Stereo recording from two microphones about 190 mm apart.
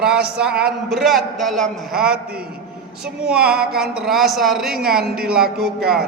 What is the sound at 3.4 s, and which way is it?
A man's voice, 5° right (ahead or behind).